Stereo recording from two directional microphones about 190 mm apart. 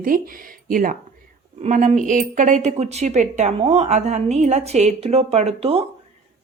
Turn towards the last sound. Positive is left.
turn(degrees=-30)  # may be behind; listen again after turning